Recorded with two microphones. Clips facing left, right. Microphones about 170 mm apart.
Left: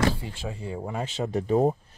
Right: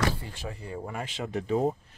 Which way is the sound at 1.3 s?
40° left (ahead or behind).